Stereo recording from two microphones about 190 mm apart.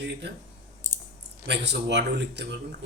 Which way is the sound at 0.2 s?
60° right (ahead or behind).